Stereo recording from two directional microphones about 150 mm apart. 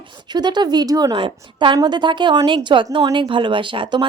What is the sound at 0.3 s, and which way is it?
A woman's voice, 30° right (ahead or behind).